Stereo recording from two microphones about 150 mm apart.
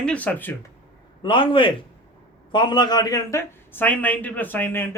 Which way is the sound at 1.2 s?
35° left (ahead or behind).